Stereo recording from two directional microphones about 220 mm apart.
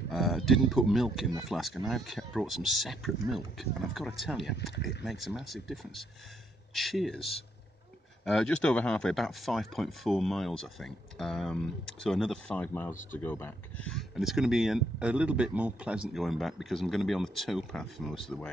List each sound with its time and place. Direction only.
0.1 s speech: centre (ahead or behind)
8.3 s speech: 5° left (ahead or behind)